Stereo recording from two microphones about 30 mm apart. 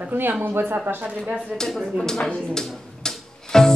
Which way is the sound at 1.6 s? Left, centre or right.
Left.